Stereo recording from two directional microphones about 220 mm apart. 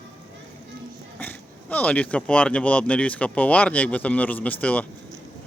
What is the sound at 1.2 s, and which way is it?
Speech, 5° left (ahead or behind).